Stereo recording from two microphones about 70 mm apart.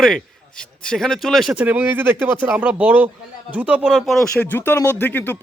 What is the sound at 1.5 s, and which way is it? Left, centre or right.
Speech, right.